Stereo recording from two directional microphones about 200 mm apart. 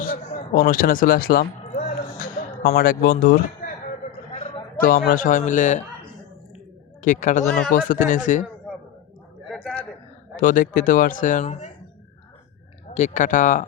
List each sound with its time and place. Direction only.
0.0 s a sound: 40° left (ahead or behind)
0.5 s speech: 45° left (ahead or behind)
3.6 s basketball bounce: 45° left (ahead or behind)
4.3 s a man's voice: 30° left (ahead or behind)
7.0 s a man's voice: 40° left (ahead or behind)
9.5 s a sound: 5° left (ahead or behind)
10.3 s a man's voice: 40° left (ahead or behind)
12.9 s a man's voice: 35° left (ahead or behind)